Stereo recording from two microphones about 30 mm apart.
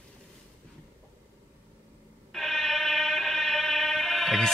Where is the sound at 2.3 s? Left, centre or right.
Centre.